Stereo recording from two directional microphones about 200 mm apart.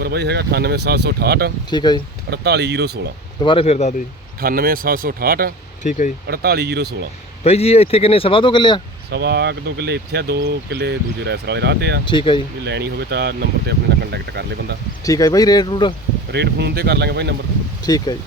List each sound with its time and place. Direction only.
0.0 s speech: 55° right (ahead or behind)
1.7 s speech: 20° left (ahead or behind)
2.3 s speech: 55° right (ahead or behind)
3.4 s speech: 25° left (ahead or behind)
4.4 s speech: 45° right (ahead or behind)
5.8 s speech: 40° left (ahead or behind)
6.2 s speech: 55° right (ahead or behind)
7.4 s speech: 30° left (ahead or behind)
9.0 s speech: 55° right (ahead or behind)
12.0 s speech: 25° left (ahead or behind)
12.6 s speech: 55° right (ahead or behind)
15.0 s speech: 15° left (ahead or behind)
16.3 s speech: 55° right (ahead or behind)
17.8 s speech: 20° left (ahead or behind)